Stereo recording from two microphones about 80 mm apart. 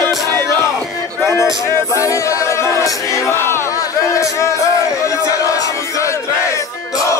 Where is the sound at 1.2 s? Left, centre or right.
Left.